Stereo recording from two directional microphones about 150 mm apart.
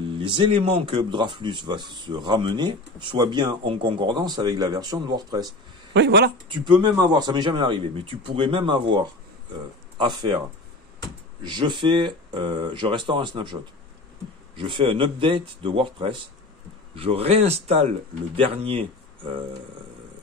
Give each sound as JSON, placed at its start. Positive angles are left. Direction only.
{"t": 0.2, "sound": "speech", "side_deg": -35}
{"t": 6.5, "sound": "speech", "side_deg": -30}
{"t": 11.4, "sound": "speech", "side_deg": -30}
{"t": 14.6, "sound": "speech", "side_deg": -35}